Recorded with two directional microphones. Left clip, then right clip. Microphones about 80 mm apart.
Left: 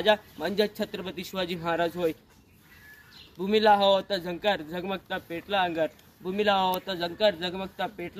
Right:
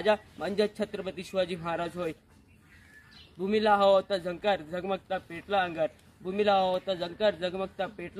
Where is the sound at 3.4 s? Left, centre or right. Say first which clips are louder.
Left 3 dB; centre.